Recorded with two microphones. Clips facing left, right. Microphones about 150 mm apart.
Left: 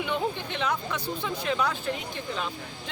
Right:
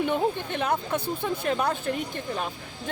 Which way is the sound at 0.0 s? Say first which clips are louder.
Right 4 dB; 50° right (ahead or behind).